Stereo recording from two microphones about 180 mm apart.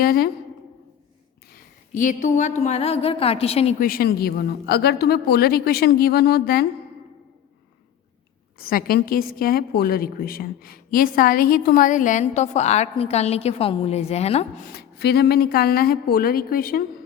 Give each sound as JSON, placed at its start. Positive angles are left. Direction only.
{"t": 0.0, "sound": "a woman's voice", "side_deg": 55}
{"t": 1.5, "sound": "a woman's voice", "side_deg": 45}
{"t": 3.8, "sound": "a woman's voice", "side_deg": 55}
{"t": 8.5, "sound": "a woman's voice", "side_deg": 55}
{"t": 14.7, "sound": "a woman's voice", "side_deg": 60}